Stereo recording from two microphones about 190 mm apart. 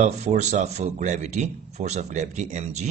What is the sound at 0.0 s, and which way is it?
Speech, 40° right (ahead or behind).